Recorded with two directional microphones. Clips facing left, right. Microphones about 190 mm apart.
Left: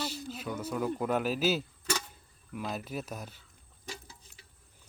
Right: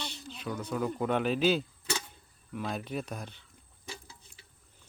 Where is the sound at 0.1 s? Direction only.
5° left (ahead or behind).